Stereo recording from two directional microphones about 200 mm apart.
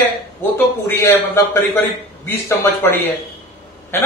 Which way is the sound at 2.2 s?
10° left (ahead or behind).